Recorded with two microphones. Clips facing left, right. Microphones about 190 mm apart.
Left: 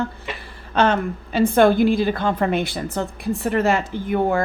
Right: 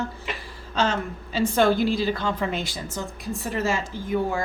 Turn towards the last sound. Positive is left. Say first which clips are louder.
# left 5 dB
turn(degrees=60)  # may be behind; listen again after turning